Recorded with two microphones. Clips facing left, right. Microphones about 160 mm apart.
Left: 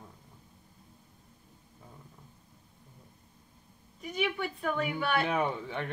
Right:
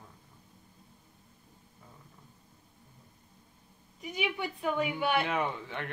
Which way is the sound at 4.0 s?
15° right (ahead or behind).